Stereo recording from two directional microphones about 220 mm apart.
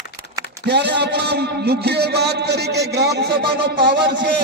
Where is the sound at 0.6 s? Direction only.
50° right (ahead or behind).